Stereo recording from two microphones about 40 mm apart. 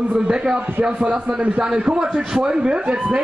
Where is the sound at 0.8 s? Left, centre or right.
Right.